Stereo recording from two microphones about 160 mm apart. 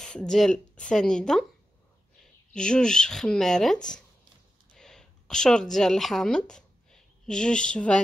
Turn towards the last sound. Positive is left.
turn(degrees=5)  # may be behind; listen again after turning